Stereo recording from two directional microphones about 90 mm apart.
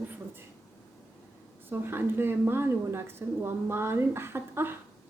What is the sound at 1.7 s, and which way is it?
Speech, 25° right (ahead or behind).